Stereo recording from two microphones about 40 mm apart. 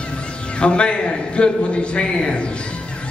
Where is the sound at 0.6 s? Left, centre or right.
Left.